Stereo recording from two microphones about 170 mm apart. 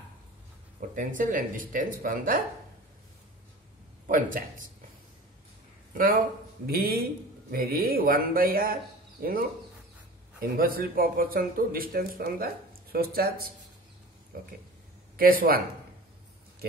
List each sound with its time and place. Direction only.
0.7 s speech: 50° right (ahead or behind)
4.1 s speech: 55° right (ahead or behind)
5.9 s speech: 55° right (ahead or behind)
10.4 s speech: 60° right (ahead or behind)